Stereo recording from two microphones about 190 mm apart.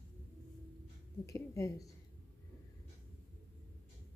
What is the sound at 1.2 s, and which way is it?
Speech, 15° left (ahead or behind).